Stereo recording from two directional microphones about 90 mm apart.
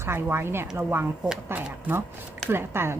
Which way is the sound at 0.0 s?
25° right (ahead or behind).